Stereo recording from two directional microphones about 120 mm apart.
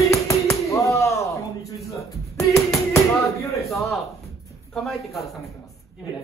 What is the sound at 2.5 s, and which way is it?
Tap, 25° left (ahead or behind).